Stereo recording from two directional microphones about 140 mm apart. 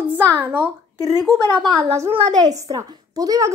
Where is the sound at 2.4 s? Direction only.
25° right (ahead or behind).